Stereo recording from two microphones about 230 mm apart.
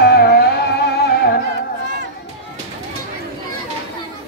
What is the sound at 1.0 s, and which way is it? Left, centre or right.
Music, left.